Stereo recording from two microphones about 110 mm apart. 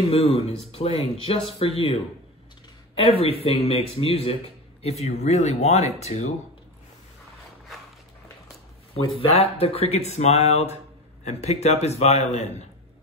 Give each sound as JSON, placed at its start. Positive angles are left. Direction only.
{"t": 0.1, "sound": "speech", "side_deg": 60}
{"t": 3.0, "sound": "speech", "side_deg": 60}
{"t": 4.8, "sound": "speech", "side_deg": 70}
{"t": 8.9, "sound": "speech", "side_deg": 65}